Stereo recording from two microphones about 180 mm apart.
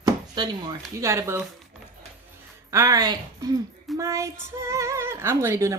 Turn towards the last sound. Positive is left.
turn(degrees=-15)  # may be behind; listen again after turning